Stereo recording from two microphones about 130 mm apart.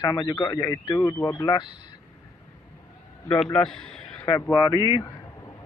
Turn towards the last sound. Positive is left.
turn(degrees=30)  # may be behind; listen again after turning